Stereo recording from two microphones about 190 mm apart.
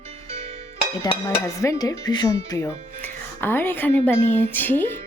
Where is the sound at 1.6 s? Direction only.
20° left (ahead or behind).